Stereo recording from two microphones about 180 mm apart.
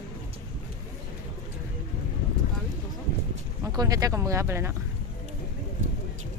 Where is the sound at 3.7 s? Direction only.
20° right (ahead or behind).